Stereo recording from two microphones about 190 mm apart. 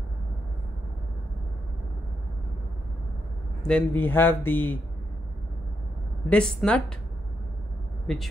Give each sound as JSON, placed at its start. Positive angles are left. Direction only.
{"t": 3.6, "sound": "a man's voice", "side_deg": 5}
{"t": 6.2, "sound": "speech", "side_deg": 5}
{"t": 8.1, "sound": "speech", "side_deg": 0}